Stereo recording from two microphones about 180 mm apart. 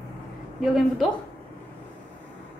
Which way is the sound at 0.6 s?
Centre (ahead or behind).